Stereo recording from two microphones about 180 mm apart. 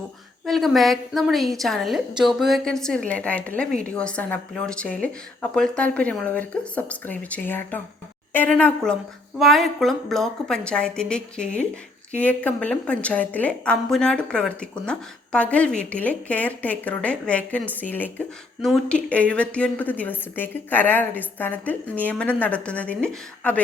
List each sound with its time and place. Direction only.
0.4 s a woman's voice: centre (ahead or behind)